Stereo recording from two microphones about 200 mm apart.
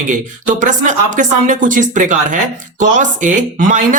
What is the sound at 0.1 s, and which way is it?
Speech, 40° right (ahead or behind).